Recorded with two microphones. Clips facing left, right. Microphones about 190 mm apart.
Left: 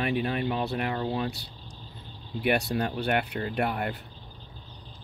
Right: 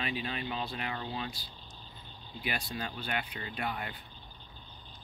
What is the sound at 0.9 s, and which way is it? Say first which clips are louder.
Speech: left 9 dB; 50° left (ahead or behind).